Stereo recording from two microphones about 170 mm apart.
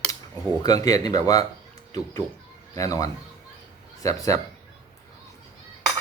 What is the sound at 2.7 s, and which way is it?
Speech, 20° left (ahead or behind).